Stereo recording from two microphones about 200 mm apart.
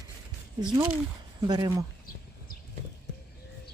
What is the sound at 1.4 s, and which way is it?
Speech, 20° right (ahead or behind).